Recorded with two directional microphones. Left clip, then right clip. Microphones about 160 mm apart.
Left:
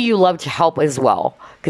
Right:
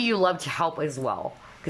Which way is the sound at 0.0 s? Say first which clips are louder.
Left 8 dB; 25° left (ahead or behind).